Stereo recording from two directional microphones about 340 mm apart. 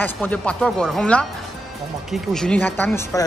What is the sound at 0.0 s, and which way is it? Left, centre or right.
A woman's voice, centre.